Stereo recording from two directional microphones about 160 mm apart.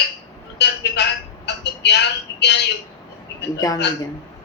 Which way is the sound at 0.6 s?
90° left.